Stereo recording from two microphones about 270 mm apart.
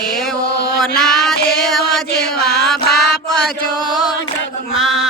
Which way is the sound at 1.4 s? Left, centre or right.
Left.